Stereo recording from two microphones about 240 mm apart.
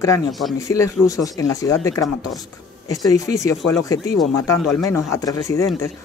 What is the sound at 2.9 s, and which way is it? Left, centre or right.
Speech, centre.